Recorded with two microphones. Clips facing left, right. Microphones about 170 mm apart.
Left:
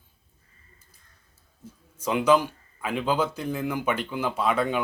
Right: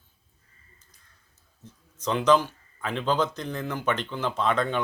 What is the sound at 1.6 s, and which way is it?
Speech, 10° left (ahead or behind).